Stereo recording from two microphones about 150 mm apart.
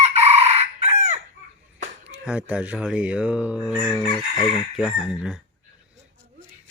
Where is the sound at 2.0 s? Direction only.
10° right (ahead or behind).